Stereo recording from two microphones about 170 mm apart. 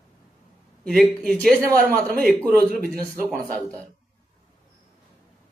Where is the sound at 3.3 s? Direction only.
55° right (ahead or behind).